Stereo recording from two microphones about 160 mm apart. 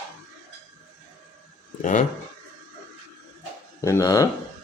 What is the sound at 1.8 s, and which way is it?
Speech, 50° left (ahead or behind).